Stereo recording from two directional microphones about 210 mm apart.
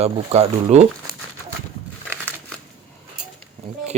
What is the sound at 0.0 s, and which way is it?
Speech, 30° right (ahead or behind).